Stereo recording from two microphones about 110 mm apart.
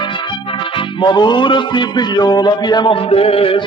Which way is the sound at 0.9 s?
45° left (ahead or behind).